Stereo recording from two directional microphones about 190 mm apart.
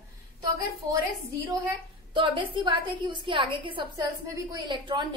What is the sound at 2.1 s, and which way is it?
A woman's voice, 25° right (ahead or behind).